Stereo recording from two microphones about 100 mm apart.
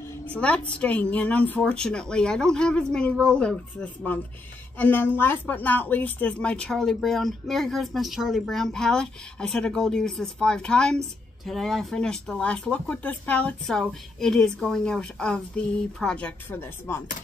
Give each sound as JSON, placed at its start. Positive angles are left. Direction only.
{"t": 0.3, "sound": "a woman's voice", "side_deg": 15}